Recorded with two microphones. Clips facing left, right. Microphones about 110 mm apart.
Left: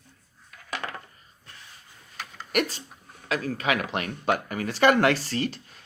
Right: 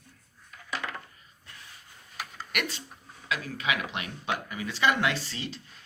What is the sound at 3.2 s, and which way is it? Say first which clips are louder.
Speech: left 5 dB; 45° left (ahead or behind).